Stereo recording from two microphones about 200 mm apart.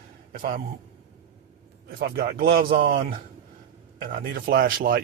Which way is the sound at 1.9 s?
50° right (ahead or behind).